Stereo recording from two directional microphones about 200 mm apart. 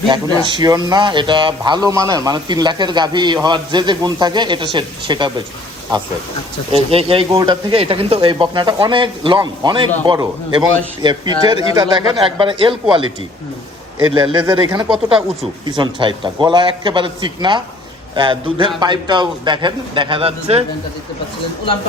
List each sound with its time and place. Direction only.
0.1 s speech: 20° right (ahead or behind)
6.7 s speech: 30° right (ahead or behind)
14.3 s speech: 20° right (ahead or behind)
14.8 s speech: 5° right (ahead or behind)
15.6 s speech: 25° right (ahead or behind)